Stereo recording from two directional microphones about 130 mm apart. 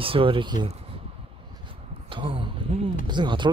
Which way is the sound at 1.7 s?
40° right (ahead or behind).